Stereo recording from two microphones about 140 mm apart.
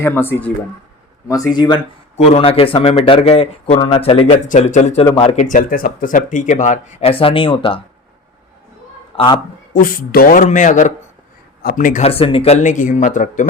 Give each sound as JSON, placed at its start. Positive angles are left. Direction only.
{"t": 0.0, "sound": "speech", "side_deg": 15}
{"t": 1.3, "sound": "speech", "side_deg": 25}
{"t": 2.1, "sound": "speech", "side_deg": 45}
{"t": 4.4, "sound": "speech", "side_deg": 60}
{"t": 5.4, "sound": "speech", "side_deg": 70}
{"t": 9.1, "sound": "a man's voice", "side_deg": 35}
{"t": 9.7, "sound": "speech", "side_deg": 90}
{"t": 11.6, "sound": "speech", "side_deg": 85}
{"t": 12.0, "sound": "speech", "side_deg": 45}
{"t": 12.7, "sound": "speech", "side_deg": 65}